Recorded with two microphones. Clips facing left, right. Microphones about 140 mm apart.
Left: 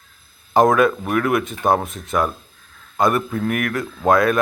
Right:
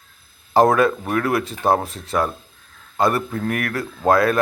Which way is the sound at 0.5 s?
30° right (ahead or behind).